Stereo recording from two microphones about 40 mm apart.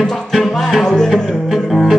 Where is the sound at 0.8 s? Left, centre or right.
Centre.